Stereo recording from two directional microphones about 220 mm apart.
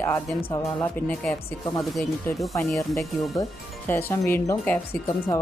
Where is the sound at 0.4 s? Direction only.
15° left (ahead or behind).